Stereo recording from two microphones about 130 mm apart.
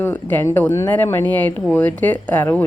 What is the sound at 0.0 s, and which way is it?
Speech, 15° left (ahead or behind).